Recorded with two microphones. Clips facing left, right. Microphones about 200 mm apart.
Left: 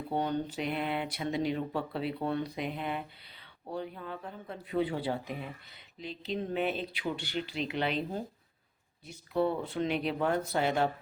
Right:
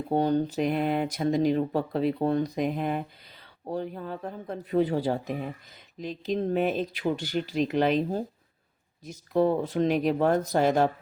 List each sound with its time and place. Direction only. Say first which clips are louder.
0.1 s speech: right 8 dB; 40° right (ahead or behind)